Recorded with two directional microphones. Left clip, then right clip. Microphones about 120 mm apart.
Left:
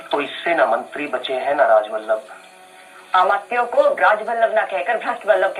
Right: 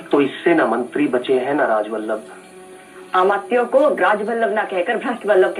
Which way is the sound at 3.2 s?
30° left (ahead or behind).